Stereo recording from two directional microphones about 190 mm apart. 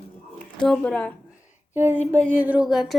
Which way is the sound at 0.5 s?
5° left (ahead or behind).